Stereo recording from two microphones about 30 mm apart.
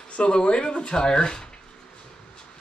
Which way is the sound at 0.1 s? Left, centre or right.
Left.